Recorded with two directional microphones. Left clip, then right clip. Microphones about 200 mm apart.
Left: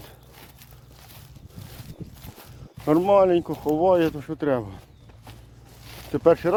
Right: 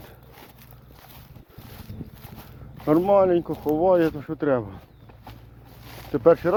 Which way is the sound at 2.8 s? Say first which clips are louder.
Even; 30° left (ahead or behind).